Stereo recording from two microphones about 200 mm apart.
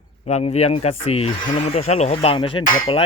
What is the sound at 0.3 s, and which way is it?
Speech, 35° left (ahead or behind).